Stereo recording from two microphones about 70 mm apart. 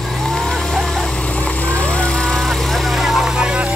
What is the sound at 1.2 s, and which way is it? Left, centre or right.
Vehicle, centre.